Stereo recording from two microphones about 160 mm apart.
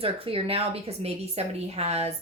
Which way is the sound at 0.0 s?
35° right (ahead or behind).